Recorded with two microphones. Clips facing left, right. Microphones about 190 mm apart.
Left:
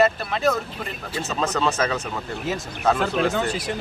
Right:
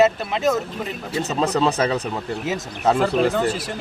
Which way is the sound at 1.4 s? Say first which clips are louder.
Right 3 dB; 35° right (ahead or behind).